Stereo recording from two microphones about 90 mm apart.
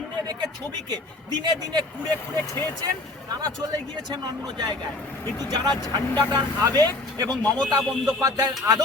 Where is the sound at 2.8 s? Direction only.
45° right (ahead or behind).